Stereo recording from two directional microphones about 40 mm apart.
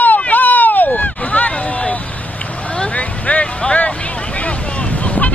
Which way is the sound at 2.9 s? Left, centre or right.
Left.